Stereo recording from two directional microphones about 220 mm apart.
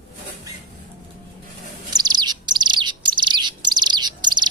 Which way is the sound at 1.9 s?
20° right (ahead or behind).